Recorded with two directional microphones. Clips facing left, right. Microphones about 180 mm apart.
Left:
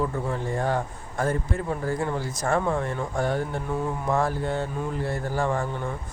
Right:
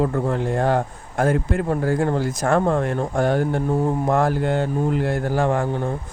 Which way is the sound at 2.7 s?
70° right (ahead or behind).